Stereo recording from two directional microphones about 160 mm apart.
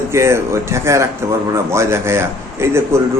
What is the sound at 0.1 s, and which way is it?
A man's voice, 15° right (ahead or behind).